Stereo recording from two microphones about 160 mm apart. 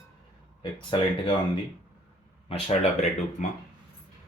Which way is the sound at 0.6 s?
30° left (ahead or behind).